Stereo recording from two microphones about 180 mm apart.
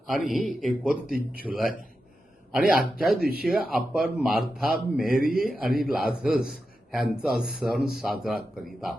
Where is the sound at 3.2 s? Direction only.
60° right (ahead or behind).